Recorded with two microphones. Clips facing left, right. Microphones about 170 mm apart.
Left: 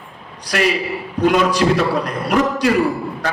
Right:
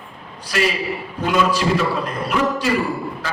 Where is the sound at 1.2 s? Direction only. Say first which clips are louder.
Left 4 dB; 75° left (ahead or behind).